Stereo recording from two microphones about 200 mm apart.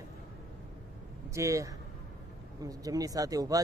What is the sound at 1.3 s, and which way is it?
Speech, 15° right (ahead or behind).